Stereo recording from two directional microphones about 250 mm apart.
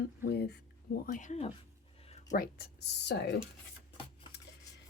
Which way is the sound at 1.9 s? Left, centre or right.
Left.